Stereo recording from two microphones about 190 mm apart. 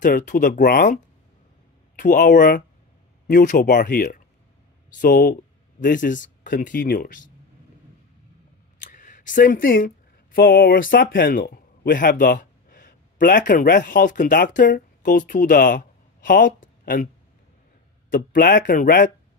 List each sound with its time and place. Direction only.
0.0 s speech: 45° left (ahead or behind)
2.0 s speech: 45° left (ahead or behind)
8.8 s a man's voice: 40° left (ahead or behind)
18.1 s speech: 45° left (ahead or behind)